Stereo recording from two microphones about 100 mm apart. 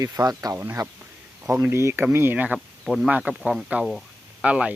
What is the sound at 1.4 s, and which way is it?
Speech, 25° right (ahead or behind).